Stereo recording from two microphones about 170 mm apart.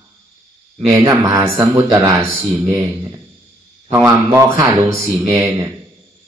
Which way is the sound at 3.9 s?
10° right (ahead or behind).